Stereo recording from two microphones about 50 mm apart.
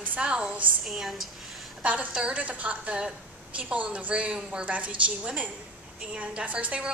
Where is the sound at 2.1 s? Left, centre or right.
Right.